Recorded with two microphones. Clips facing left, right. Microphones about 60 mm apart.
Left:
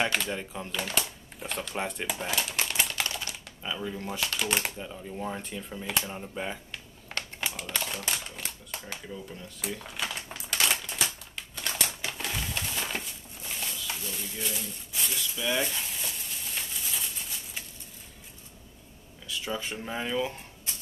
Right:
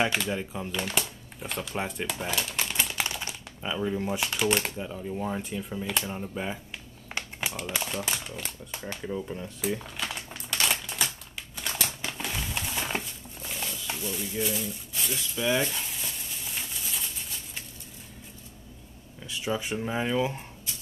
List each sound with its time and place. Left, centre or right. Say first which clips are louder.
0.0 s speech: right 2 dB; centre
2.9 s typing: right 1 dB; centre
3.3 s speech: right 2 dB; centre
4.5 s speech: right 3 dB; centre
7.1 s typing: right 1 dB; centre
7.6 s speech: right 2 dB; centre
7.9 s speech: right 2 dB; centre
9.0 s speech: right 7 dB; right
9.8 s typewriter: even; centre
11.5 s crumpling: even; centre
13.5 s a sound: right 1 dB; centre
15.1 s speech: right 3 dB; centre
15.6 s a sound: right 1 dB; centre
19.2 s speech: right 3 dB; centre